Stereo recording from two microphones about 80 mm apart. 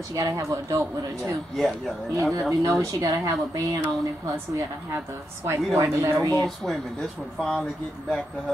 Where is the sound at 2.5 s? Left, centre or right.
Right.